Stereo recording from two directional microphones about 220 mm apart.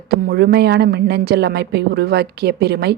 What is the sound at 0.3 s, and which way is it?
A woman's voice, 45° right (ahead or behind).